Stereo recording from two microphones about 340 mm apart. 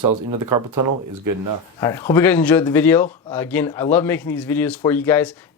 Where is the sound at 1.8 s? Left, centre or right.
Centre.